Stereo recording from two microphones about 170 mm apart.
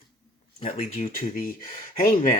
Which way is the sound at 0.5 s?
40° left (ahead or behind).